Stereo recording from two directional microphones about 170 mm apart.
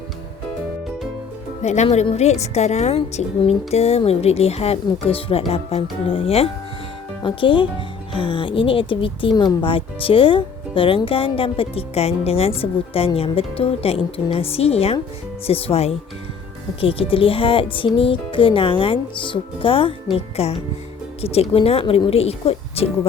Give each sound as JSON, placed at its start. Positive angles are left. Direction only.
{"t": 1.6, "sound": "speech", "side_deg": 40}